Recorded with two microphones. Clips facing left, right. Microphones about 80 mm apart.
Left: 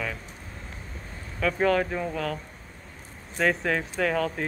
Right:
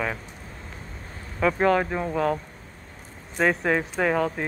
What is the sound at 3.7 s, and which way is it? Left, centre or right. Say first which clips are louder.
Speech: right 3 dB; right.